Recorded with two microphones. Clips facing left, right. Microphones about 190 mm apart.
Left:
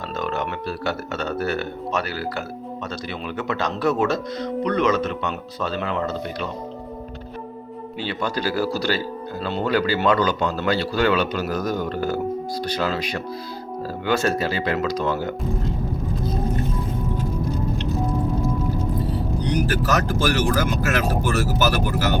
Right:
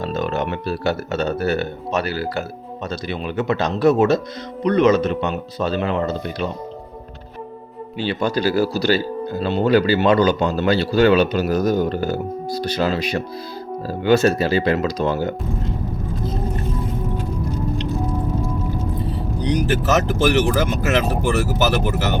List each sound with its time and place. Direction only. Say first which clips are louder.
0.1 s speech: right 1 dB; 25° right (ahead or behind)
8.0 s speech: right 6 dB; 25° right (ahead or behind)
19.5 s speech: right 4 dB; 20° right (ahead or behind)